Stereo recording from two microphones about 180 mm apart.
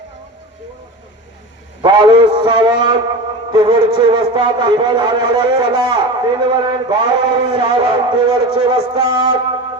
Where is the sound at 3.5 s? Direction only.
25° right (ahead or behind).